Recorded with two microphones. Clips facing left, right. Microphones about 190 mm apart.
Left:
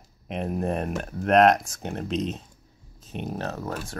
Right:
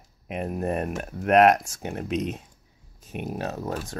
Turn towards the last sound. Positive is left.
turn(degrees=-15)  # may be behind; listen again after turning